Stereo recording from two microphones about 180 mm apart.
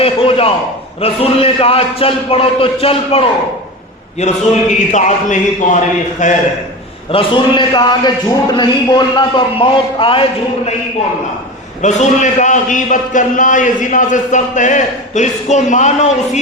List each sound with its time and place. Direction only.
0.0 s a sound: 30° left (ahead or behind)
1.0 s a man's voice: 35° left (ahead or behind)
4.9 s a man's voice: 40° left (ahead or behind)
7.1 s a man's voice: 30° left (ahead or behind)
11.8 s a man's voice: 40° left (ahead or behind)